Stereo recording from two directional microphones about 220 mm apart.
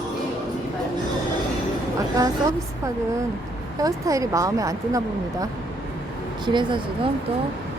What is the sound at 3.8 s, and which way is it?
Speech, 15° right (ahead or behind).